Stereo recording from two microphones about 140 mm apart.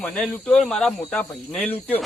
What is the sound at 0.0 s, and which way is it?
Speech, 5° left (ahead or behind).